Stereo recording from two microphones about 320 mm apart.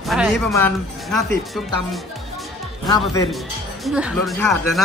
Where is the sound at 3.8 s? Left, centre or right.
Centre.